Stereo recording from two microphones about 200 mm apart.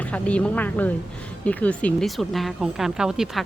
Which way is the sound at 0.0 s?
5° left (ahead or behind).